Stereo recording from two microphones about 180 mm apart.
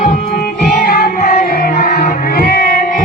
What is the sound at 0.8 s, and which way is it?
Music, 55° left (ahead or behind).